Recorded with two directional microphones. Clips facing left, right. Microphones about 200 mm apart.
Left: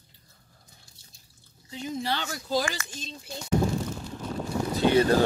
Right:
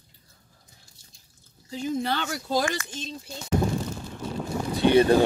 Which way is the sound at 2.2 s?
55° right (ahead or behind).